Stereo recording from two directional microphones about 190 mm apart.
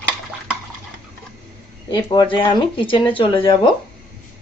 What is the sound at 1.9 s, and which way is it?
Speech, 25° left (ahead or behind).